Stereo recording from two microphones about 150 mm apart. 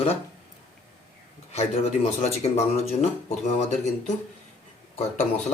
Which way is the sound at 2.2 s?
45° left (ahead or behind).